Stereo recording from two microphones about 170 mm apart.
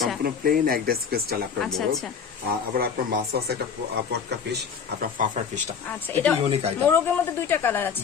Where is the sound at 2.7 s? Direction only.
60° right (ahead or behind).